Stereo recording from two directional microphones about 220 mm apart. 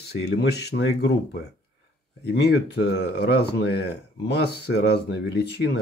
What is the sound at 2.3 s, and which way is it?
Speech, 50° left (ahead or behind).